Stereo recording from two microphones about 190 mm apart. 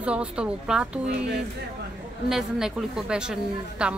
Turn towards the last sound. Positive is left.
turn(degrees=-5)  # may be behind; listen again after turning